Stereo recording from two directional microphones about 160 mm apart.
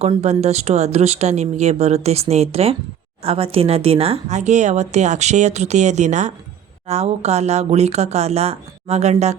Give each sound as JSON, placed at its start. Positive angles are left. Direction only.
{"t": 0.0, "sound": "speech", "side_deg": -40}